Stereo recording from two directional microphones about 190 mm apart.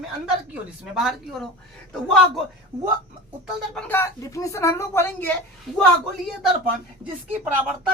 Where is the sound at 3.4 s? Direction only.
5° left (ahead or behind).